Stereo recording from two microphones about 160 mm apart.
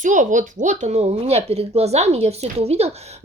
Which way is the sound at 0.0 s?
50° right (ahead or behind).